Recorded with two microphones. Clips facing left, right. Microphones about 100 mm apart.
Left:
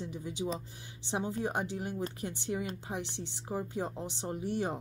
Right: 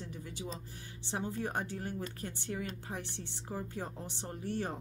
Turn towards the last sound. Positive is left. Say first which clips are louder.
# left 4 dB
turn(degrees=15)  # may be behind; listen again after turning